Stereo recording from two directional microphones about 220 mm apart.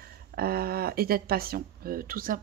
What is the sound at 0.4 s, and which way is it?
A woman's voice, 45° right (ahead or behind).